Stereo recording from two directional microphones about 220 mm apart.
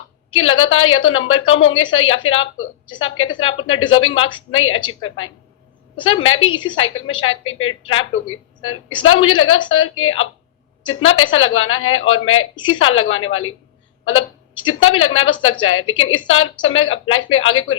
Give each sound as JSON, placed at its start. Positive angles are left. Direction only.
{"t": 0.3, "sound": "a woman's voice", "side_deg": 65}
{"t": 6.4, "sound": "a woman's voice", "side_deg": 20}
{"t": 7.3, "sound": "a woman's voice", "side_deg": 65}
{"t": 12.5, "sound": "a woman's voice", "side_deg": 20}
{"t": 12.8, "sound": "a woman's voice", "side_deg": 65}